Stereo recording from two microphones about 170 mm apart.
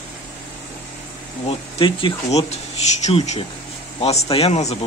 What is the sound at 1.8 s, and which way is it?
Speech, 35° left (ahead or behind).